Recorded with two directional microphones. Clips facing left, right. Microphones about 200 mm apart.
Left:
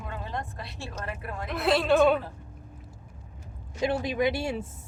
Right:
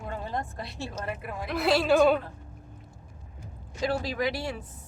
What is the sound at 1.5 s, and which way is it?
Speech, centre (ahead or behind).